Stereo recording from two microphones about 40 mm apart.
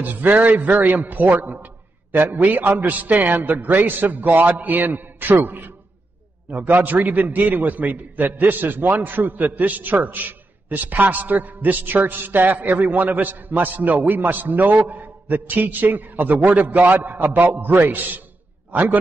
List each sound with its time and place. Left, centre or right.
0.0 s a man's voice: right
6.7 s a man's voice: right